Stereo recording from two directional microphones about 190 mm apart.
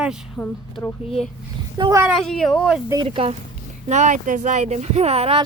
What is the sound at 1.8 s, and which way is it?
Speech, 20° right (ahead or behind).